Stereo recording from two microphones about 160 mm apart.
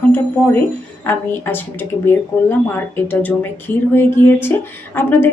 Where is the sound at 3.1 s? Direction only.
10° left (ahead or behind).